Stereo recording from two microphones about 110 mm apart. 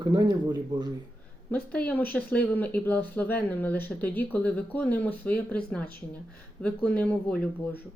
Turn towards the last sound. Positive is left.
turn(degrees=15)  # may be behind; listen again after turning